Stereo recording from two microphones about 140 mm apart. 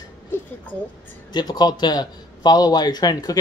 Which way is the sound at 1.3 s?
30° left (ahead or behind).